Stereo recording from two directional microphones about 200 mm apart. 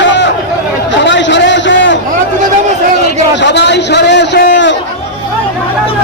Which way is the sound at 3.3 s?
60° left (ahead or behind).